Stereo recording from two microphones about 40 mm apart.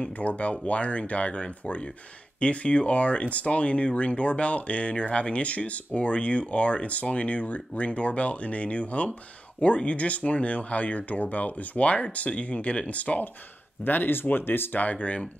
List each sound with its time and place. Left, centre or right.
0.0 s speech: left
13.8 s speech: left
14.8 s speech: left